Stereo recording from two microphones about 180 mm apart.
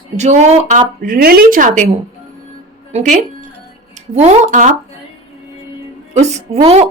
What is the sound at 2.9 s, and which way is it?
A woman's voice, 40° right (ahead or behind).